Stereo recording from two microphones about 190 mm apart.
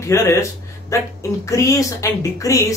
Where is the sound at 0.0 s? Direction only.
15° left (ahead or behind).